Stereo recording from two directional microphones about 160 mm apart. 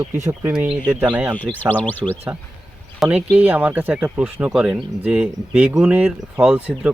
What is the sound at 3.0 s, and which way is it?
Speech, centre (ahead or behind).